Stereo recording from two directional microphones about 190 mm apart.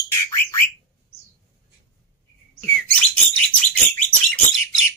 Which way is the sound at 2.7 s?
5° left (ahead or behind).